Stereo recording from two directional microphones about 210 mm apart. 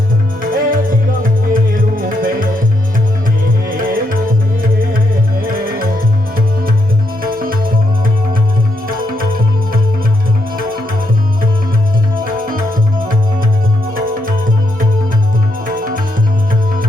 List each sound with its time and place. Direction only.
0.5 s music: 40° right (ahead or behind)
3.8 s music: 40° right (ahead or behind)
7.2 s music: 45° right (ahead or behind)
12.2 s music: 40° right (ahead or behind)
13.9 s music: 40° right (ahead or behind)
15.6 s music: 40° right (ahead or behind)